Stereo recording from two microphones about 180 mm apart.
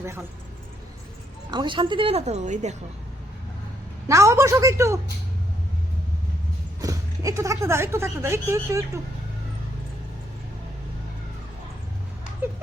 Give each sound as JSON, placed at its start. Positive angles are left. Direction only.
{"t": 0.0, "sound": "speech", "side_deg": -15}
{"t": 1.5, "sound": "a woman's voice", "side_deg": -25}
{"t": 4.1, "sound": "speech", "side_deg": -15}
{"t": 6.8, "sound": "speech", "side_deg": -20}